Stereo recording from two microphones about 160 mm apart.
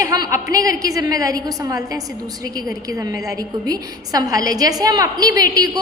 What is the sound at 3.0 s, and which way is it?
A woman's voice, 20° right (ahead or behind).